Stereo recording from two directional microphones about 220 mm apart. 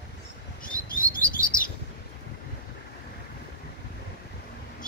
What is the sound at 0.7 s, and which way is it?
Chirp, 40° left (ahead or behind).